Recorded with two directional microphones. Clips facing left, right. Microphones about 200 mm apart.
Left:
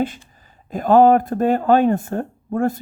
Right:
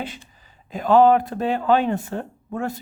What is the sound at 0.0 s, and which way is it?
Speech, 50° left (ahead or behind).